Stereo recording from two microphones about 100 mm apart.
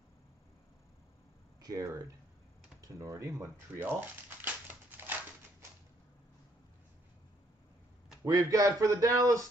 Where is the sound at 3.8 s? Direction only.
15° right (ahead or behind).